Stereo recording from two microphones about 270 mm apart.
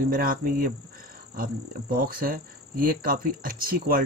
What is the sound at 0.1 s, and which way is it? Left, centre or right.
Speech, right.